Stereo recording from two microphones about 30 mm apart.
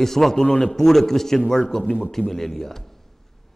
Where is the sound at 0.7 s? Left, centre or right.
Centre.